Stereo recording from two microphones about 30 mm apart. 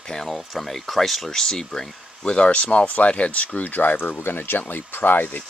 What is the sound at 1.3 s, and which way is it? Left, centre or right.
Speech, centre.